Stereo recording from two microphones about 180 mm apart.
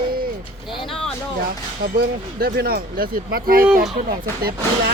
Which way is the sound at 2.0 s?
55° right (ahead or behind).